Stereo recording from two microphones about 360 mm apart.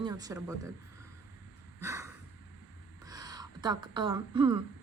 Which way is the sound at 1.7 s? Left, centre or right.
Centre.